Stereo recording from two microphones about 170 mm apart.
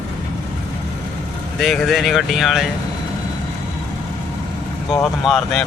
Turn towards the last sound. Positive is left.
turn(degrees=0)  # may be behind; listen again after turning